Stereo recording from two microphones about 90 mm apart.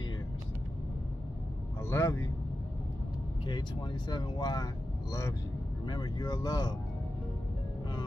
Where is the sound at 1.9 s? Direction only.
30° left (ahead or behind).